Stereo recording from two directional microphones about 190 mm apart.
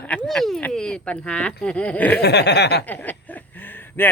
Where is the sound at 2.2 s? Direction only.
60° left (ahead or behind).